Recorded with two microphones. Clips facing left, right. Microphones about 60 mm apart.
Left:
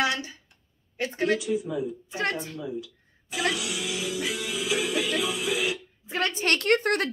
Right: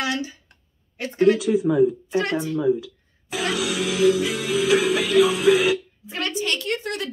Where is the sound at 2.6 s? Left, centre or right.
Right.